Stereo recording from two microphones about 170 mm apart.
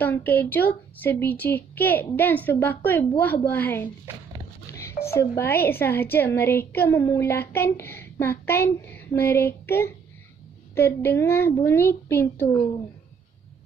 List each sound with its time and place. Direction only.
0.0 s a woman's voice: 10° left (ahead or behind)
4.7 s a sound: 15° left (ahead or behind)
5.7 s a woman's voice: 15° left (ahead or behind)